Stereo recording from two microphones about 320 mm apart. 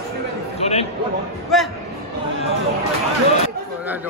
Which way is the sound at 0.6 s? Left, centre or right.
Centre.